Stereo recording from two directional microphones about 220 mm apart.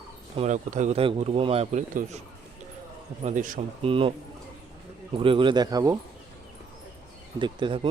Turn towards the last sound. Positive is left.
turn(degrees=-20)  # may be behind; listen again after turning